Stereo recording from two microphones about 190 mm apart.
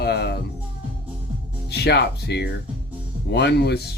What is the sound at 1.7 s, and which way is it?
Speech, 60° left (ahead or behind).